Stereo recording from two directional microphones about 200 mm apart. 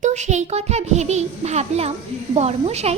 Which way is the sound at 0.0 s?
35° right (ahead or behind).